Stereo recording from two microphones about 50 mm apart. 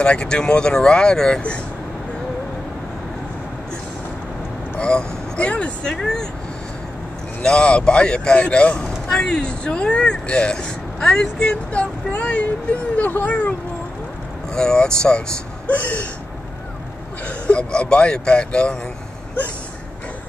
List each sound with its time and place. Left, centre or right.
0.0 s speech: centre
4.7 s speech: centre
5.9 s speech: centre
7.4 s speech: centre
11.4 s speech: left
14.5 s speech: centre
15.6 s speech: left
17.5 s speech: left